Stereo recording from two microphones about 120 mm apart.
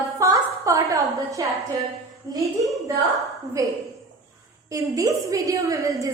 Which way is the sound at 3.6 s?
30° right (ahead or behind).